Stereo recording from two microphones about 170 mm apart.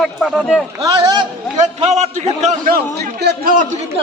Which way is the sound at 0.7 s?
20° right (ahead or behind).